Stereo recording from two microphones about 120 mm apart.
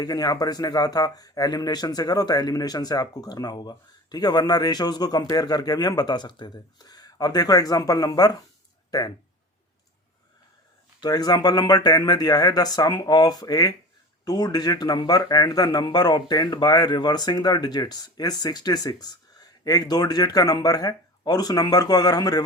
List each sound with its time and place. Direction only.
0.0 s speech: 35° left (ahead or behind)
11.0 s speech: 35° left (ahead or behind)